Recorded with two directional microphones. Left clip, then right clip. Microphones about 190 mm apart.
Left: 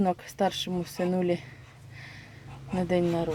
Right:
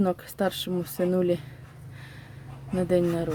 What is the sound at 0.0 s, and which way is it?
Speech, 20° right (ahead or behind).